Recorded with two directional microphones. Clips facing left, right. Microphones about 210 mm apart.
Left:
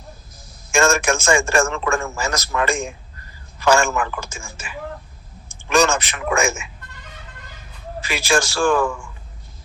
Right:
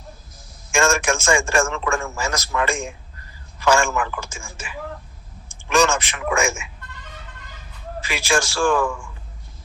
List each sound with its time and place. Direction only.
0.7 s a man's voice: 40° left (ahead or behind)
8.0 s a man's voice: 40° left (ahead or behind)